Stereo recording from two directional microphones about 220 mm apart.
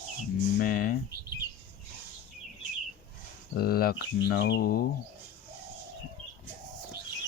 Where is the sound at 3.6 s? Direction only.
45° left (ahead or behind).